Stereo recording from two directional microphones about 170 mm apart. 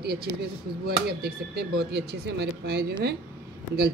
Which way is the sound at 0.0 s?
70° right (ahead or behind).